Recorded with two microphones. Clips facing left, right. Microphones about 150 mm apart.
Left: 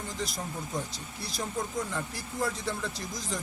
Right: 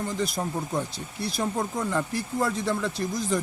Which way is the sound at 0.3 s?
60° right (ahead or behind).